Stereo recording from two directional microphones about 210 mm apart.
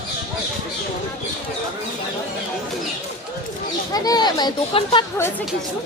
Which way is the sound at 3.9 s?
20° left (ahead or behind).